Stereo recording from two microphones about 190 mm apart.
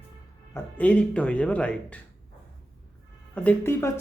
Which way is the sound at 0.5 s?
5° left (ahead or behind).